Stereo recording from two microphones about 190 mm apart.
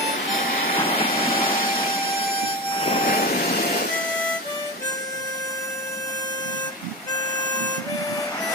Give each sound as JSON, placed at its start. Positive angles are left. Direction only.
{"t": 0.3, "sound": "vehicle", "side_deg": 45}
{"t": 1.7, "sound": "a sound", "side_deg": 25}
{"t": 2.7, "sound": "train", "side_deg": 35}
{"t": 3.1, "sound": "vehicle", "side_deg": 50}